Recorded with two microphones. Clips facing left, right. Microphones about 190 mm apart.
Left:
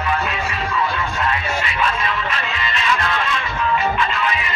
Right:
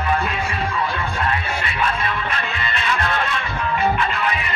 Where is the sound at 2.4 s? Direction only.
50° right (ahead or behind).